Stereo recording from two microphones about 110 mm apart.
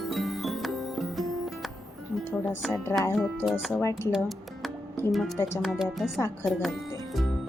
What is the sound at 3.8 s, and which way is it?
Music, 30° left (ahead or behind).